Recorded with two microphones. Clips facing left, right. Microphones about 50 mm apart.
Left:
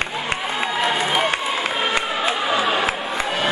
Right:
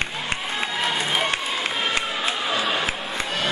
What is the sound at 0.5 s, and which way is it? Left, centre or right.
Run, centre.